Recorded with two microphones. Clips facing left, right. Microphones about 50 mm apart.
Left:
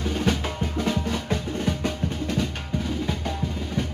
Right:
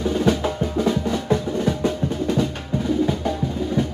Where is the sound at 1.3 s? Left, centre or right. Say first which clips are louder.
Right 7 dB; right.